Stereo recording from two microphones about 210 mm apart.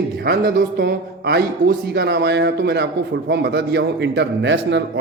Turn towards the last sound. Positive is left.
turn(degrees=-55)  # may be behind; listen again after turning